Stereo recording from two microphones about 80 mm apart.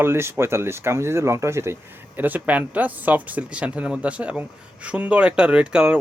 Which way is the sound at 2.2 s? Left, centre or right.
Right.